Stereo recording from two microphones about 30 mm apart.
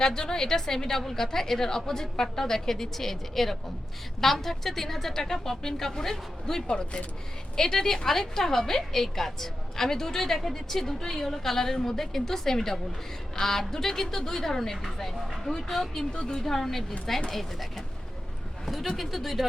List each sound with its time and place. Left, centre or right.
0.0 s a woman's voice: left
6.7 s speech: left
7.5 s a woman's voice: centre
14.8 s a woman's voice: centre
16.0 s a woman's voice: centre
18.9 s speech: centre